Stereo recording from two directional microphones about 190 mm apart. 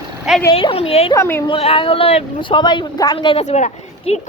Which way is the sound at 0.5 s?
30° left (ahead or behind).